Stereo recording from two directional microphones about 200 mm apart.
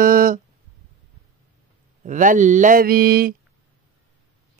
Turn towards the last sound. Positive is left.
turn(degrees=-50)  # may be behind; listen again after turning